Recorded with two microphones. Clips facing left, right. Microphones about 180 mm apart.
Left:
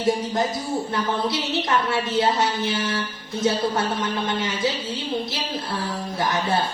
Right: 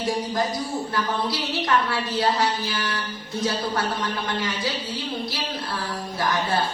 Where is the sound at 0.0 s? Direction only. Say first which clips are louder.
Left 3 dB; 25° left (ahead or behind).